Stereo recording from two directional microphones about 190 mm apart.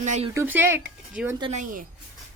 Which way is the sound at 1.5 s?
45° right (ahead or behind).